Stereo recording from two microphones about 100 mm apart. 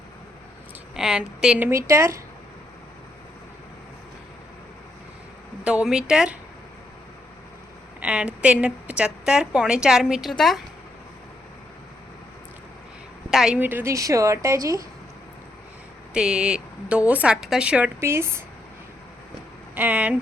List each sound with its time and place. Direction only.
0.9 s a woman's voice: 5° right (ahead or behind)
1.6 s speech: 30° right (ahead or behind)
5.6 s a woman's voice: 10° right (ahead or behind)
8.0 s a woman's voice: 15° right (ahead or behind); by 10.6 s centre (ahead or behind)
13.3 s speech: 5° right (ahead or behind)
13.6 s speech: 20° right (ahead or behind)
13.9 s a woman's voice: 30° right (ahead or behind)
16.1 s a woman's voice: 10° right (ahead or behind)
18.0 s speech: 25° right (ahead or behind)
19.7 s a woman's voice: 20° right (ahead or behind)